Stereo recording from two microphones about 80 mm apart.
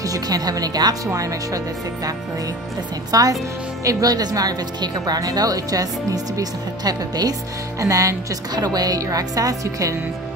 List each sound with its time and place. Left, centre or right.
0.0 s a woman's voice: right
3.1 s a woman's voice: right
7.8 s a woman's voice: right